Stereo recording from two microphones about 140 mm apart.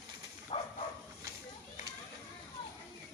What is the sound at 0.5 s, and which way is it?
Dog, 40° left (ahead or behind).